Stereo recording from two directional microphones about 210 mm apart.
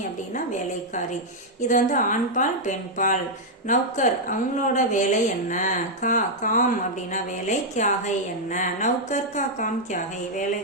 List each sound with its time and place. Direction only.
1.6 s a woman's voice: 35° left (ahead or behind)